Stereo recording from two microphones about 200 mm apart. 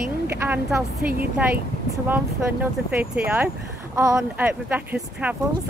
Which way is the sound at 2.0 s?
10° right (ahead or behind).